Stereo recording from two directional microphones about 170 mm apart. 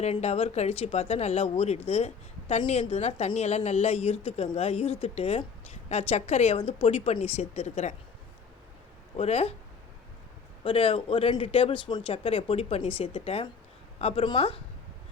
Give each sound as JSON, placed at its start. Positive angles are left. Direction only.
{"t": 0.0, "sound": "a woman's voice", "side_deg": 40}
{"t": 9.1, "sound": "a woman's voice", "side_deg": 40}
{"t": 10.6, "sound": "a woman's voice", "side_deg": 30}